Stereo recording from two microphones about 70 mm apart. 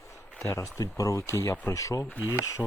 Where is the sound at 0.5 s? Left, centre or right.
Left.